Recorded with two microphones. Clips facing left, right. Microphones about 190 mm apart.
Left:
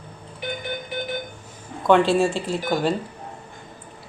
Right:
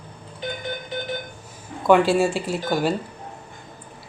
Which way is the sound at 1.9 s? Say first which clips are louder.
Even; 10° right (ahead or behind).